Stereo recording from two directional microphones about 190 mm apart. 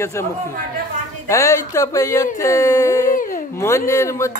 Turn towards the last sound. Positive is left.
turn(degrees=15)  # may be behind; listen again after turning